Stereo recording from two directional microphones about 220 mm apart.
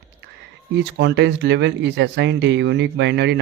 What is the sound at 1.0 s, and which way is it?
Speech, 50° right (ahead or behind).